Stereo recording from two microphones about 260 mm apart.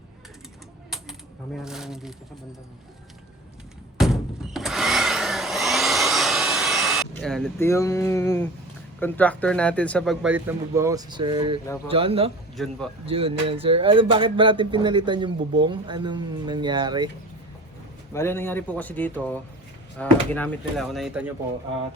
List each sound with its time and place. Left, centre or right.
1.5 s speech: centre
3.9 s vacuum cleaner: centre
9.0 s speech: centre; by 12.3 s right
12.5 s speech: centre
13.1 s speech: right
18.1 s speech: centre